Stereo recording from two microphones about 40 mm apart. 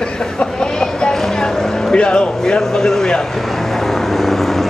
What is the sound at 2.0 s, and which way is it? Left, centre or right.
A man's voice, left.